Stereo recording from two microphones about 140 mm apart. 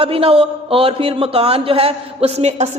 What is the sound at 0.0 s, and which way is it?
Speech, 40° right (ahead or behind).